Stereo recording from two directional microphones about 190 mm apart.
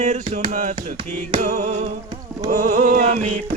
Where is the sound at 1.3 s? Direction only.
45° right (ahead or behind).